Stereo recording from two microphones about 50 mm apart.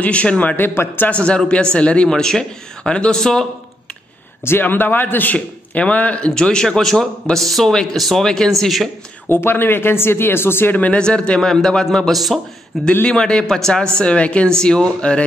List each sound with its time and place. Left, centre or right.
0.0 s a man's voice: left
1.1 s speech: left
2.0 s a man's voice: centre
4.5 s a man's voice: left
6.2 s a man's voice: centre
9.3 s speech: left
10.7 s a man's voice: left
11.0 s a man's voice: centre